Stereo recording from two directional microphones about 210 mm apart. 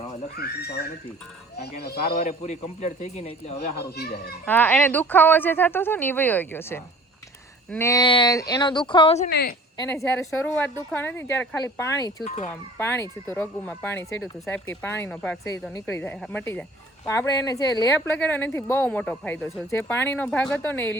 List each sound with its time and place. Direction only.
0.3 s a child's voice: 50° left (ahead or behind)
2.2 s a man's voice: 30° left (ahead or behind)
3.6 s a child's voice: 50° left (ahead or behind)
4.4 s speech: 10° left (ahead or behind); by 9.3 s 30° left (ahead or behind)
9.3 s a child's voice: 50° left (ahead or behind)
9.7 s speech: 15° left (ahead or behind)